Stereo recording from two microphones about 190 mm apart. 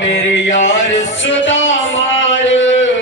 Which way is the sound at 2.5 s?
75° left (ahead or behind).